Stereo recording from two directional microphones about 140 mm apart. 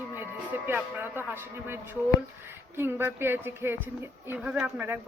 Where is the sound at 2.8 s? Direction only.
15° right (ahead or behind).